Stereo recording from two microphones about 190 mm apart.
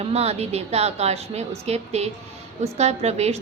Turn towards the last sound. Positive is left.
turn(degrees=-35)  # may be behind; listen again after turning